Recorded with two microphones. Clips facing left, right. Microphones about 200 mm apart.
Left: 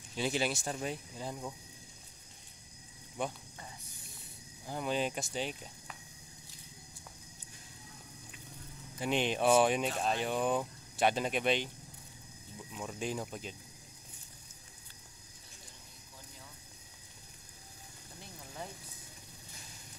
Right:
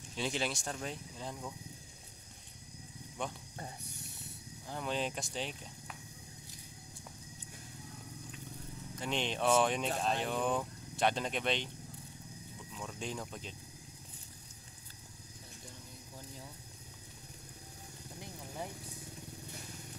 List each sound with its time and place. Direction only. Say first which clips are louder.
0.1 s speech: left 3 dB; 5° left (ahead or behind)
3.2 s speech: left 3 dB; 5° left (ahead or behind)
3.8 s a sound: right 5 dB; 70° right (ahead or behind)
4.6 s speech: left 3 dB; 5° left (ahead or behind)
8.9 s speech: left 4 dB; 10° left (ahead or behind)
12.7 s speech: left 4 dB; 5° left (ahead or behind)